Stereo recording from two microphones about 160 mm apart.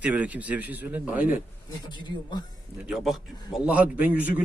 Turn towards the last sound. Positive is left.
turn(degrees=-10)  # may be behind; listen again after turning